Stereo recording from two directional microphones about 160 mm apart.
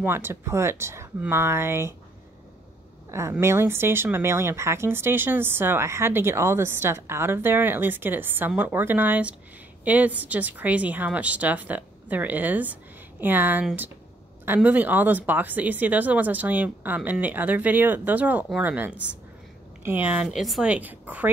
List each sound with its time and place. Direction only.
0.0 s speech: 15° right (ahead or behind)
3.1 s speech: 15° right (ahead or behind)